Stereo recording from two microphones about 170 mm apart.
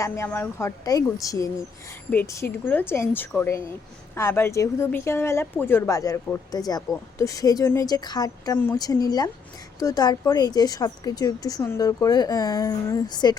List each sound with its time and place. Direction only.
0.0 s a woman's voice: 15° left (ahead or behind)